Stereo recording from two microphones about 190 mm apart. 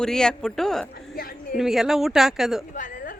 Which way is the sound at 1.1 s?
50° left (ahead or behind).